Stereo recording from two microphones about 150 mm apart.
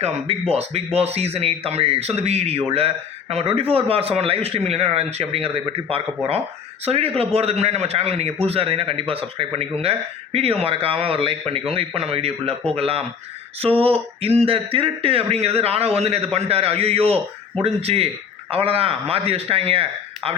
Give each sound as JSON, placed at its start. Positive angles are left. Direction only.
{"t": 0.5, "sound": "speech", "side_deg": -45}